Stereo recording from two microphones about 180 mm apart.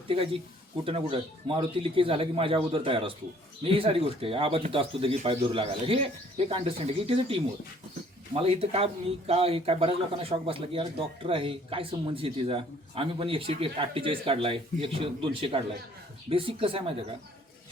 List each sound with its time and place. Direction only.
0.9 s speech: 30° right (ahead or behind)